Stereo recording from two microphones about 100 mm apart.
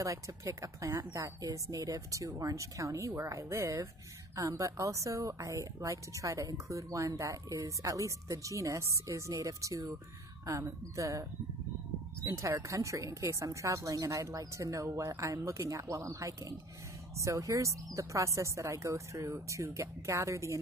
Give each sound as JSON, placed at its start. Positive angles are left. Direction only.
{"t": 0.0, "sound": "speech", "side_deg": -30}